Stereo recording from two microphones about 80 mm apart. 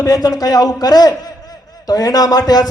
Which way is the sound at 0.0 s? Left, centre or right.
Left.